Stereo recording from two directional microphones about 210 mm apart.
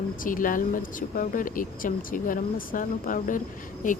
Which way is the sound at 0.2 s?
40° left (ahead or behind).